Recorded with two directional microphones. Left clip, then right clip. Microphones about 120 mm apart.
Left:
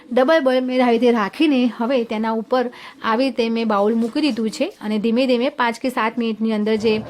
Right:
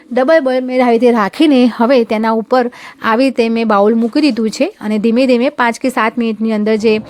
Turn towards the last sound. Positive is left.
turn(degrees=-60)  # may be behind; listen again after turning